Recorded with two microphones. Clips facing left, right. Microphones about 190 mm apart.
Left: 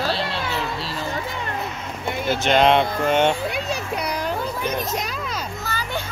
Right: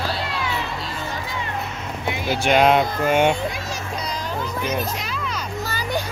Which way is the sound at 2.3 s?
10° right (ahead or behind).